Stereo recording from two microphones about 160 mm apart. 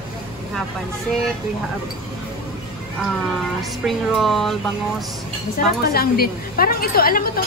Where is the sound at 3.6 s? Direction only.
Centre (ahead or behind).